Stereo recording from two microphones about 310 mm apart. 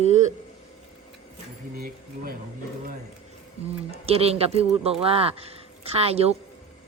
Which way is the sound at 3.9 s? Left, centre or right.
Centre.